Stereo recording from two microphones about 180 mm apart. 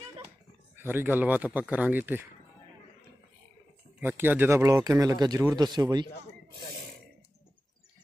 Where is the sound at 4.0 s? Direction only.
10° right (ahead or behind).